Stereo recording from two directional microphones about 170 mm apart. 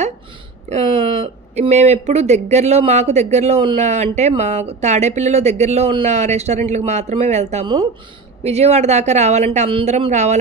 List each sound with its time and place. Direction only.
0.7 s speech: 40° right (ahead or behind)